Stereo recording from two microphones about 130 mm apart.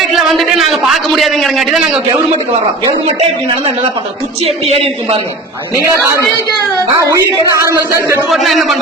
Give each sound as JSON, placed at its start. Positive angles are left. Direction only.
{"t": 0.0, "sound": "a man's voice", "side_deg": 0}
{"t": 4.4, "sound": "a man's voice", "side_deg": -50}
{"t": 6.9, "sound": "a woman's voice", "side_deg": -25}
{"t": 8.3, "sound": "speech", "side_deg": 0}